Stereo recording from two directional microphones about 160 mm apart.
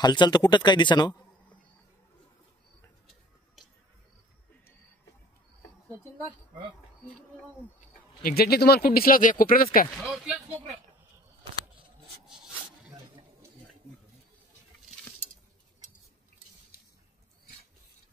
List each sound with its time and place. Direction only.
0.0 s speech: 25° left (ahead or behind)
8.2 s speech: 70° left (ahead or behind)
9.9 s speech: centre (ahead or behind)
16.7 s a sound: 70° left (ahead or behind)